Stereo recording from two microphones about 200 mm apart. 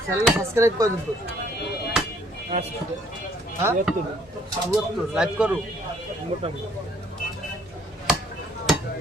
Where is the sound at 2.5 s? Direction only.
30° right (ahead or behind).